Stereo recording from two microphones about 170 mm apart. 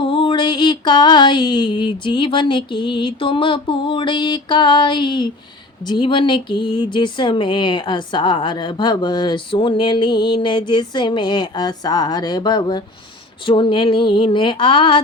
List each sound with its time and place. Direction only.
0.0 s speech: 30° left (ahead or behind)